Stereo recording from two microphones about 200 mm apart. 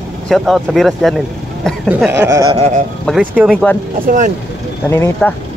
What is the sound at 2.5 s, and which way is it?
Speech, 35° right (ahead or behind).